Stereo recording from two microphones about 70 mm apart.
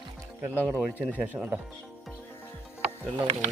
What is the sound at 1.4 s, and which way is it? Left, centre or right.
Speech, centre.